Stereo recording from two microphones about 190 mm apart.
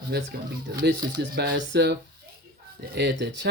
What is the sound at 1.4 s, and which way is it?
Speech, 65° right (ahead or behind).